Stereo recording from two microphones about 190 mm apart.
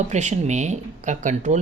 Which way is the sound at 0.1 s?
40° right (ahead or behind).